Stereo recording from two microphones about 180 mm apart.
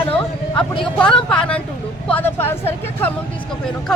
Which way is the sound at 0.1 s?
25° left (ahead or behind).